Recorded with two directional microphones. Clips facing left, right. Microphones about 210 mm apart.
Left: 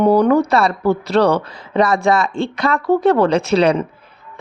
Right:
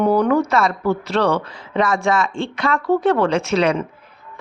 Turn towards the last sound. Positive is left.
turn(degrees=35)  # may be behind; listen again after turning